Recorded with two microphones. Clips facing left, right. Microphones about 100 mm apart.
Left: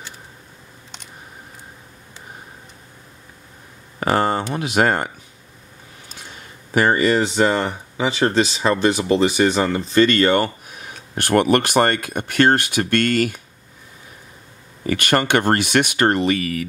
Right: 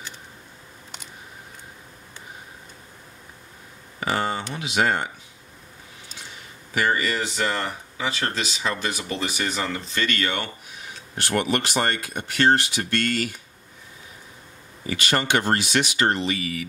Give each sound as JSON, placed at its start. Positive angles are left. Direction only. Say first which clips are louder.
{"t": 4.0, "sound": "speech", "louder": "left 7 dB", "side_deg": 50}
{"t": 6.7, "sound": "speech", "louder": "left 7 dB", "side_deg": 40}
{"t": 14.9, "sound": "speech", "louder": "left 5 dB", "side_deg": 55}